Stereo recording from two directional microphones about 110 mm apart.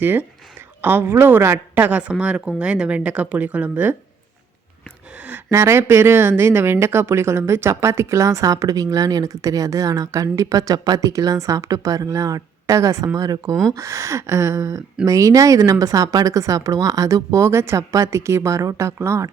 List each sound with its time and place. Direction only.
0.0 s speech: 20° right (ahead or behind)
5.5 s speech: 25° right (ahead or behind)